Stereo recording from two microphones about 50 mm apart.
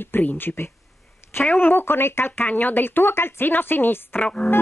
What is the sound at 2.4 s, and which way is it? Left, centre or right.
Speech, left.